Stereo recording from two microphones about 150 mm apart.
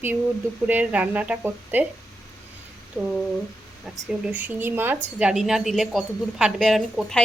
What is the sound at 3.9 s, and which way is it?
A woman's voice, 10° right (ahead or behind).